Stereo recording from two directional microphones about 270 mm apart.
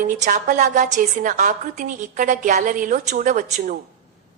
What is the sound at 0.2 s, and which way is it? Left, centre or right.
A woman's voice, right.